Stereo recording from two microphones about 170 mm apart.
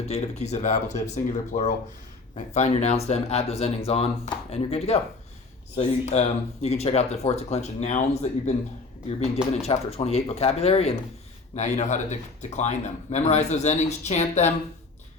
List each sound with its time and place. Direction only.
0.1 s speech: 40° left (ahead or behind)